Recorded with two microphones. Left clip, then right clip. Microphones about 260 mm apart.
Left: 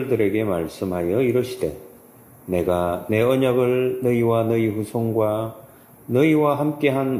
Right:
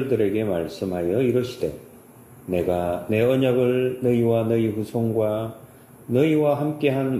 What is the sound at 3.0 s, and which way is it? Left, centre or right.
A man's voice, left.